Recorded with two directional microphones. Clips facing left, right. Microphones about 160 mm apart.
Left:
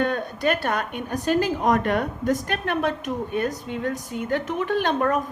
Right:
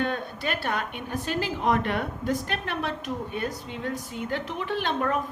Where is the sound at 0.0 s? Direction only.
45° left (ahead or behind).